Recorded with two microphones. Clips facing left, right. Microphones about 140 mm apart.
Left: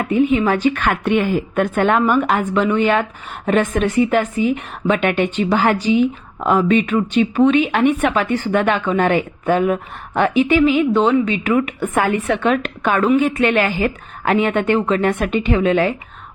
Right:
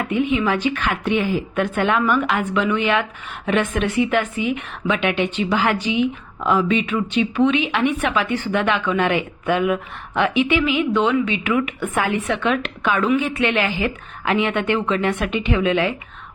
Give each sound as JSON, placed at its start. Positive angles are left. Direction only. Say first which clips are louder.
{"t": 0.0, "sound": "a woman's voice", "louder": "left 4 dB", "side_deg": 40}